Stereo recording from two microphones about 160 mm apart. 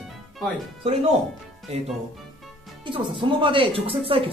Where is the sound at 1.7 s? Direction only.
40° right (ahead or behind).